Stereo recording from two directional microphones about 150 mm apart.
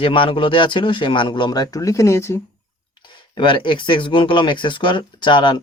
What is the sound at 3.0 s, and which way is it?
Speech, 30° left (ahead or behind).